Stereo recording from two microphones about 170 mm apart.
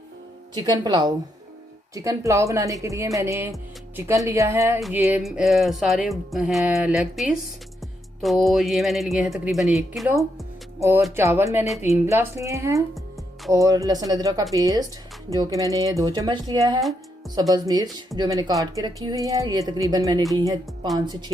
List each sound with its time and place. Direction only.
0.5 s speech: 25° right (ahead or behind); by 10.2 s centre (ahead or behind)
10.8 s speech: 15° right (ahead or behind)